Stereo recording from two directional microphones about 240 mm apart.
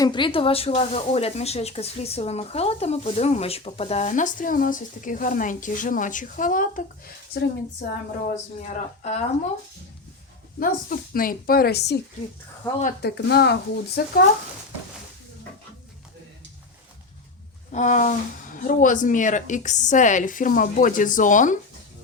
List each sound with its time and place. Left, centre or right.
0.0 s speech: centre
8.2 s speech: left
10.6 s a woman's voice: left
17.7 s a woman's voice: left